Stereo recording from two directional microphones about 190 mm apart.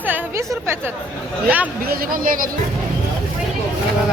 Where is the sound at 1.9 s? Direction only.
50° right (ahead or behind).